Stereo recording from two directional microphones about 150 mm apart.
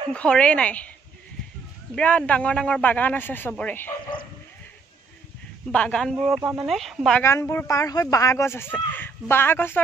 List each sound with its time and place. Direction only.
0.1 s speech: 5° left (ahead or behind)
2.0 s speech: 10° left (ahead or behind)
5.7 s speech: 5° left (ahead or behind)
7.2 s speech: 20° left (ahead or behind)